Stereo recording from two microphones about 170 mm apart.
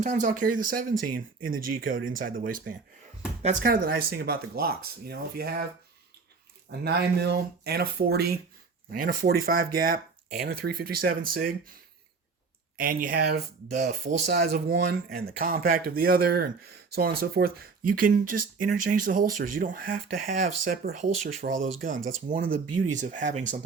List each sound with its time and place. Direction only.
0.0 s speech: 50° right (ahead or behind); by 5.6 s 65° right (ahead or behind)
6.7 s speech: 75° right (ahead or behind)
13.7 s speech: 45° right (ahead or behind)
14.3 s speech: 70° right (ahead or behind); by 20.0 s 50° right (ahead or behind)
21.0 s speech: 45° right (ahead or behind)